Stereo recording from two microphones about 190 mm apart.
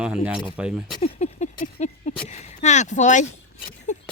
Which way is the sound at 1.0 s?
35° left (ahead or behind).